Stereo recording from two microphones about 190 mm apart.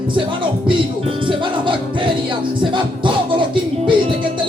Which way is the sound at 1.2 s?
25° right (ahead or behind).